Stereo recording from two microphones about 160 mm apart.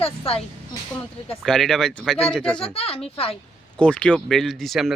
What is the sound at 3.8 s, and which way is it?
Speech, 10° left (ahead or behind).